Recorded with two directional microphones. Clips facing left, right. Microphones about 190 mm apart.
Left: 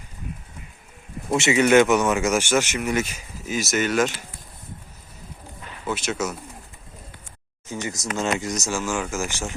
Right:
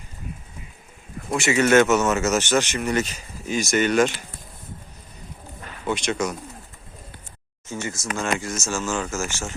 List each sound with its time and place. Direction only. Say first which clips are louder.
1.3 s speech: left 1 dB; 20° left (ahead or behind); by 4.1 s centre (ahead or behind)
5.8 s speech: right 2 dB; 5° left (ahead or behind)
7.7 s speech: even; 15° left (ahead or behind)